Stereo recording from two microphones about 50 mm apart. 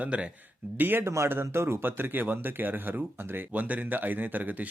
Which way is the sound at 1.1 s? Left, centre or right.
Right.